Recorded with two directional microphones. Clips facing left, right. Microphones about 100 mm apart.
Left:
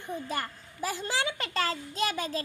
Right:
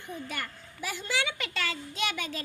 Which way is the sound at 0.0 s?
35° left (ahead or behind).